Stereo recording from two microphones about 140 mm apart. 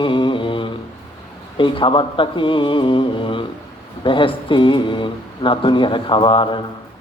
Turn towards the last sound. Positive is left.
turn(degrees=35)  # may be behind; listen again after turning